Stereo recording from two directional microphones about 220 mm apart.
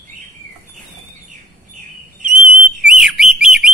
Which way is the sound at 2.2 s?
35° right (ahead or behind).